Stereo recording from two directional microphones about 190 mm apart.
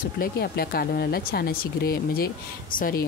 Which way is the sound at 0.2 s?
55° left (ahead or behind).